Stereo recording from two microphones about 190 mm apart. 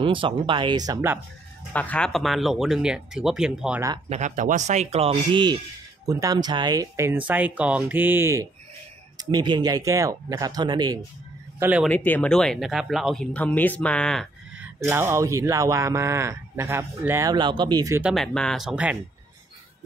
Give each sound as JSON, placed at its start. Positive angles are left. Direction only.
{"t": 0.0, "sound": "speech", "side_deg": -25}
{"t": 1.7, "sound": "speech", "side_deg": 10}
{"t": 4.1, "sound": "speech", "side_deg": -40}
{"t": 11.6, "sound": "speech", "side_deg": -5}
{"t": 11.9, "sound": "speech", "side_deg": 10}
{"t": 14.6, "sound": "speech", "side_deg": -10}
{"t": 18.0, "sound": "speech", "side_deg": 0}